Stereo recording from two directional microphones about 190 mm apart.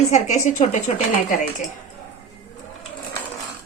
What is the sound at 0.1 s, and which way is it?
Speech, 40° left (ahead or behind).